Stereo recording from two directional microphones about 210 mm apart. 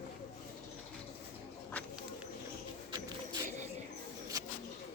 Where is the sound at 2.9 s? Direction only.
20° right (ahead or behind).